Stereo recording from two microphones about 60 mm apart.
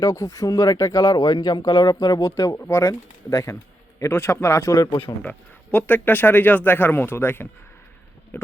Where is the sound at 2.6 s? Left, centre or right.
Left.